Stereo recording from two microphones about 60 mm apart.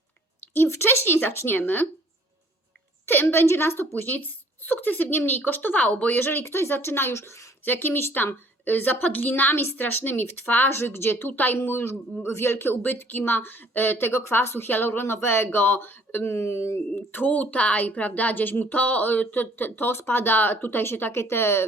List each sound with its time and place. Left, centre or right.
0.5 s speech: left
3.1 s speech: left
6.1 s speech: left
7.6 s speech: left